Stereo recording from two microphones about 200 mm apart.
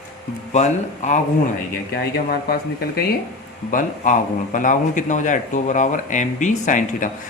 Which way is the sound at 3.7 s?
40° left (ahead or behind).